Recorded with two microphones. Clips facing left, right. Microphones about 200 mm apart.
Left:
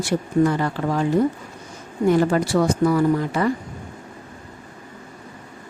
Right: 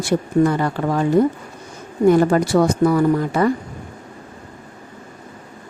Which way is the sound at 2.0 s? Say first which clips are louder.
Right 4 dB; 50° right (ahead or behind).